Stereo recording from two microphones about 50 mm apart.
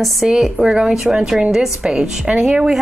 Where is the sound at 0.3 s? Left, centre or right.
Centre.